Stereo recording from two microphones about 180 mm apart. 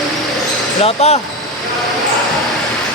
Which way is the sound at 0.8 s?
35° left (ahead or behind).